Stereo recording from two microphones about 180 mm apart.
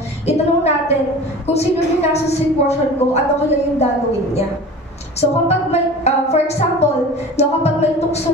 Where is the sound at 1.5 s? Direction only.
35° left (ahead or behind).